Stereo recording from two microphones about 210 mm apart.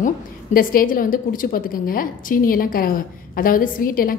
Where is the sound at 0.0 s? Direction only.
40° left (ahead or behind).